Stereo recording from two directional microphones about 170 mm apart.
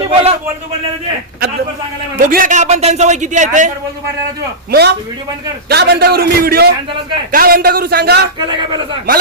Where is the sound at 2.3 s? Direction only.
50° right (ahead or behind).